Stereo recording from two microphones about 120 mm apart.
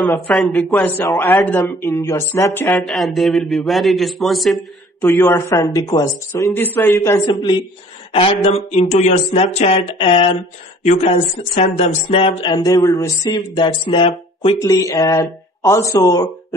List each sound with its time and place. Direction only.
0.1 s a man's voice: centre (ahead or behind)
0.7 s speech: 15° left (ahead or behind)
2.9 s a man's voice: centre (ahead or behind)
5.0 s speech: 15° left (ahead or behind); by 6.0 s 35° left (ahead or behind)
6.3 s speech: 20° left (ahead or behind)
7.2 s speech: 40° left (ahead or behind)
8.1 s speech: 50° left (ahead or behind)
12.5 s speech: 30° left (ahead or behind); by 14.6 s 45° left (ahead or behind)
14.6 s speech: 30° left (ahead or behind)